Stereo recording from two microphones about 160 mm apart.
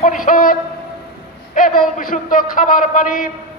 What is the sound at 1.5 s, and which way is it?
A man's voice, 60° left (ahead or behind).